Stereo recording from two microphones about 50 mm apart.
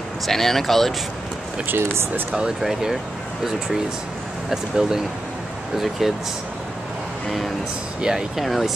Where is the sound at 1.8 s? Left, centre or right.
Right.